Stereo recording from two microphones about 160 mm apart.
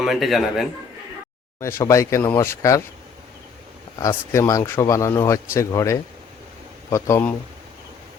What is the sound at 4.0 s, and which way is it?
Speech, 15° left (ahead or behind).